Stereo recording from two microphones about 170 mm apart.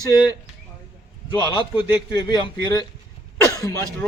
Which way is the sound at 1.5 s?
30° left (ahead or behind).